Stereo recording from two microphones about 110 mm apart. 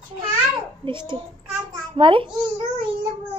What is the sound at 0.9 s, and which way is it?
A woman's voice, 45° right (ahead or behind).